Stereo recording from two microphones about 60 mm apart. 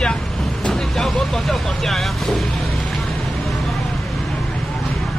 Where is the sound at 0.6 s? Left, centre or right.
Centre.